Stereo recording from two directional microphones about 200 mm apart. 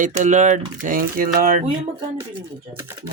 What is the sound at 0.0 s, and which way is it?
Speech, 40° right (ahead or behind).